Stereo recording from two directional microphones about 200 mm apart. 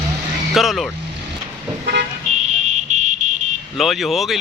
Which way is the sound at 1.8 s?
55° right (ahead or behind).